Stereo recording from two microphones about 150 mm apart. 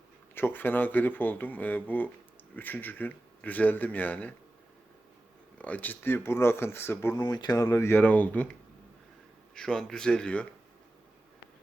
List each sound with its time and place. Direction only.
0.3 s speech: 15° left (ahead or behind)
5.5 s speech: 10° left (ahead or behind)
7.2 s speech: 25° left (ahead or behind); by 8.4 s 10° left (ahead or behind)
9.6 s speech: 5° left (ahead or behind)